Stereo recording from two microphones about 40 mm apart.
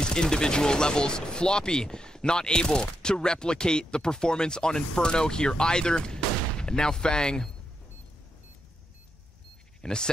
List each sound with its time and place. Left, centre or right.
0.0 s speech: centre
9.8 s speech: centre